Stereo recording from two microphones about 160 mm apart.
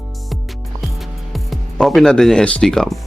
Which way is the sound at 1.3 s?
Centre (ahead or behind).